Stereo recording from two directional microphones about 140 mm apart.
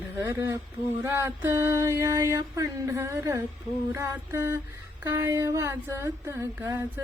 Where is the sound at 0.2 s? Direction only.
20° right (ahead or behind).